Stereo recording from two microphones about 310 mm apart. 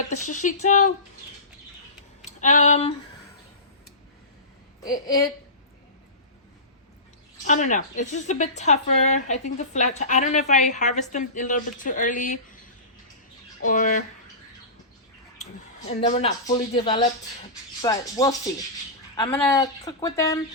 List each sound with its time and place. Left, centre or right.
0.1 s a woman's voice: left
2.2 s a sound: left
4.9 s speech: centre
7.4 s a woman's voice: left
13.6 s a woman's voice: left
15.9 s a woman's voice: left